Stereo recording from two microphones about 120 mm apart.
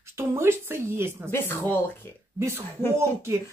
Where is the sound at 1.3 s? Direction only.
15° left (ahead or behind).